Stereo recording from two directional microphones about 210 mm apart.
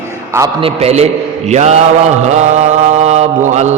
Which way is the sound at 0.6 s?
30° right (ahead or behind).